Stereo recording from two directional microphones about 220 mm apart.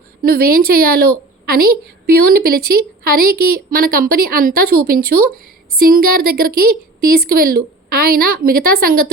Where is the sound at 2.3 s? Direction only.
45° right (ahead or behind).